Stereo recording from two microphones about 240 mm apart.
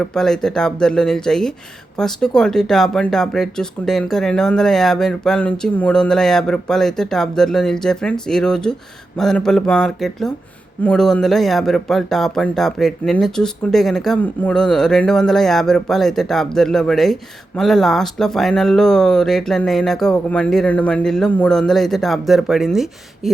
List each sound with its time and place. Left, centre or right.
0.0 s speech: centre